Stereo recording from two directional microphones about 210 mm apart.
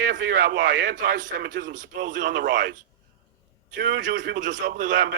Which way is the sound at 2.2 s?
55° right (ahead or behind).